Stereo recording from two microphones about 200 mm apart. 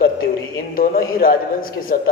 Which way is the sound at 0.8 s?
45° left (ahead or behind).